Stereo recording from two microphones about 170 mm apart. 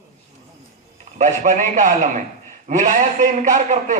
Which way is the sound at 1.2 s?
45° right (ahead or behind).